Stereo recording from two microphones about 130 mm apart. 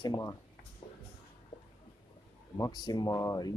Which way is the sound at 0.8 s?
40° left (ahead or behind).